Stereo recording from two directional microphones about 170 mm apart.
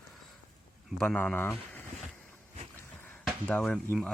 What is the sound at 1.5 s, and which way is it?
Speech, centre (ahead or behind).